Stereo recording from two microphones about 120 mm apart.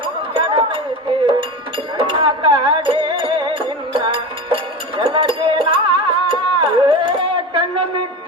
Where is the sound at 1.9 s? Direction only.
45° right (ahead or behind).